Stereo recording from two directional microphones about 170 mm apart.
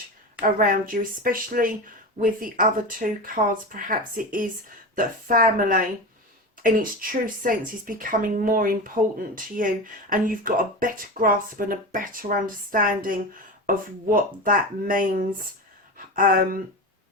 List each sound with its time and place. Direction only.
0.4 s speech: 55° right (ahead or behind)